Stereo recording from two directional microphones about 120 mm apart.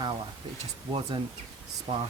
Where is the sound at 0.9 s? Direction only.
40° right (ahead or behind).